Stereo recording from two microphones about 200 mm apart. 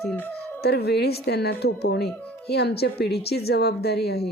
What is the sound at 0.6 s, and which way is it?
A woman's voice, 55° left (ahead or behind).